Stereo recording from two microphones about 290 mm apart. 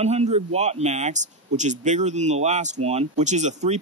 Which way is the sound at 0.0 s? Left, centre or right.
Right.